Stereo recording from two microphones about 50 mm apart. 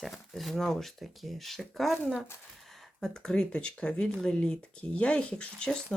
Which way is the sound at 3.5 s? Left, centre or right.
Left.